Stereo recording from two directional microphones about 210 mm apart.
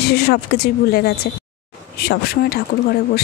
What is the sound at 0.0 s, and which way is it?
Speech, 50° left (ahead or behind).